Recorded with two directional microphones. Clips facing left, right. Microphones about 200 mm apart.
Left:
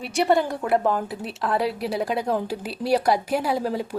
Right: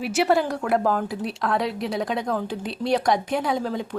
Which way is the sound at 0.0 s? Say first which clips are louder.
Even; 5° right (ahead or behind).